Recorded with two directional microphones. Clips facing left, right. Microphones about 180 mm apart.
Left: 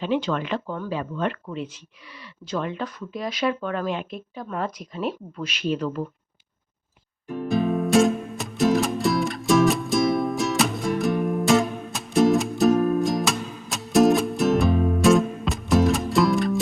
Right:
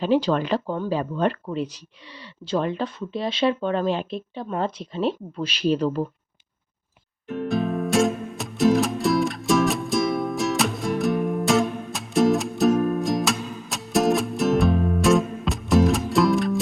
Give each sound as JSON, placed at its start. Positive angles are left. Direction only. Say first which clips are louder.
{"t": 0.0, "sound": "speech", "louder": "right 4 dB", "side_deg": -35}
{"t": 7.4, "sound": "music", "louder": "left 2 dB", "side_deg": 0}